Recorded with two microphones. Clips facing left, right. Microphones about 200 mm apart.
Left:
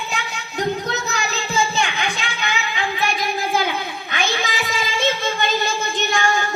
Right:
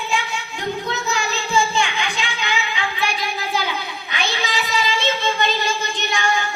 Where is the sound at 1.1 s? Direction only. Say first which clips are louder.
Right 5 dB; 40° left (ahead or behind).